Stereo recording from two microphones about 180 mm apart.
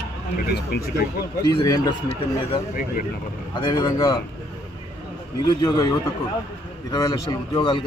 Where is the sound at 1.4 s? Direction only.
20° left (ahead or behind).